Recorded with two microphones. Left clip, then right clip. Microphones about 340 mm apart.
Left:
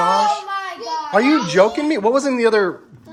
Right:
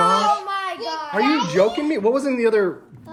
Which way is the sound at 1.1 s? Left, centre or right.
Centre.